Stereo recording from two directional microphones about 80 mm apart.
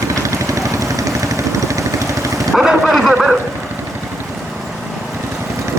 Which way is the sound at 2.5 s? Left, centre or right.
Centre.